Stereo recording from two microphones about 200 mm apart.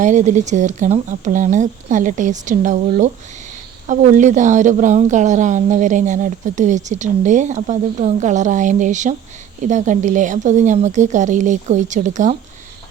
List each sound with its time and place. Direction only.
0.0 s a woman's voice: 35° right (ahead or behind)